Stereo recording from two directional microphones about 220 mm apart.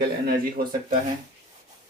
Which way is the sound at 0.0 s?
45° right (ahead or behind).